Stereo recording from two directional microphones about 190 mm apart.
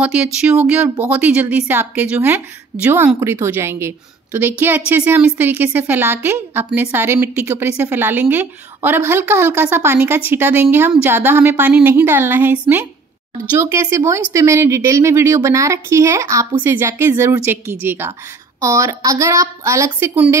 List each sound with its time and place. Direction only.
0.0 s a woman's voice: 5° right (ahead or behind)